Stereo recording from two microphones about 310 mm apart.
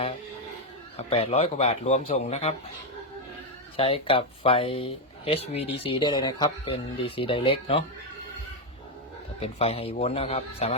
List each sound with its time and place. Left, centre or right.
0.9 s a man's voice: centre
3.8 s speech: centre
9.4 s a man's voice: centre